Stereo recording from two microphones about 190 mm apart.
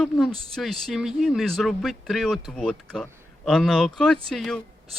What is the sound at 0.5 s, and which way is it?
A man's voice, centre (ahead or behind).